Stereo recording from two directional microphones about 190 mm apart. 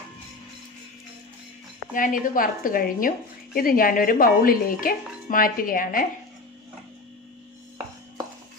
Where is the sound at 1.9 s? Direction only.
45° left (ahead or behind).